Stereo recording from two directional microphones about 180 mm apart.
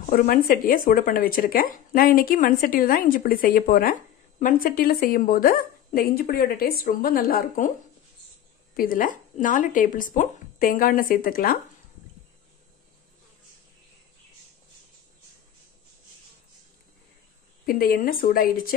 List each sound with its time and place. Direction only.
0.0 s speech: 50° left (ahead or behind)
8.7 s speech: 50° left (ahead or behind)
17.6 s speech: 55° left (ahead or behind)